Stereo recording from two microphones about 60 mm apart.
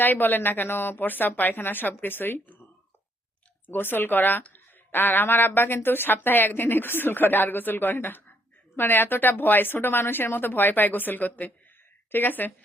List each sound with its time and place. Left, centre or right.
0.0 s speech: left
3.7 s speech: left